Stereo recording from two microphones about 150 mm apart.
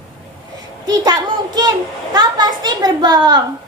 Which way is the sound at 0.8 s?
25° right (ahead or behind).